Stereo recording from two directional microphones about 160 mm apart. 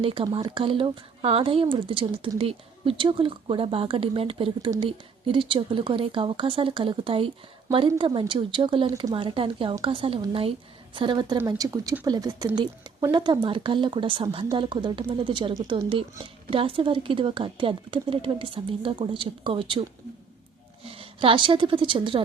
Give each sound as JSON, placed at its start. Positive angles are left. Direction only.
{"t": 0.0, "sound": "speech", "side_deg": -35}
{"t": 20.8, "sound": "a woman's voice", "side_deg": -35}